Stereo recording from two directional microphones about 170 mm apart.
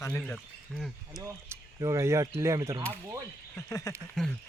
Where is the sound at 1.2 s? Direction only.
20° right (ahead or behind).